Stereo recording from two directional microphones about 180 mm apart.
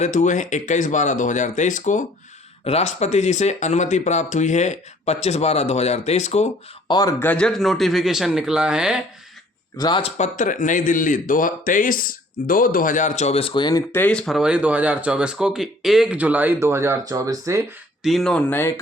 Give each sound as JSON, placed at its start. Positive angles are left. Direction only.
{"t": 0.0, "sound": "speech", "side_deg": 40}
{"t": 6.8, "sound": "speech", "side_deg": 25}
{"t": 7.2, "sound": "a man's voice", "side_deg": 10}
{"t": 9.7, "sound": "speech", "side_deg": 20}
{"t": 10.0, "sound": "speech", "side_deg": 40}
{"t": 18.0, "sound": "a man's voice", "side_deg": 0}